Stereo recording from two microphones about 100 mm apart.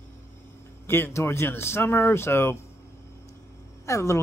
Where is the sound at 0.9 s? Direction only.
25° left (ahead or behind).